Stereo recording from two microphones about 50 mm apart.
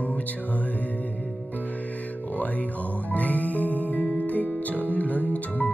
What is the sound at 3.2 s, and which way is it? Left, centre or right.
Music, left.